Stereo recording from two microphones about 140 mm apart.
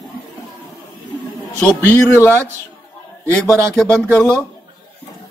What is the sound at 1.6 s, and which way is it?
A man's voice, 15° left (ahead or behind).